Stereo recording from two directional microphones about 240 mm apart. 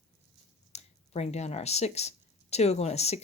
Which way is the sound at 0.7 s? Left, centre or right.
Left.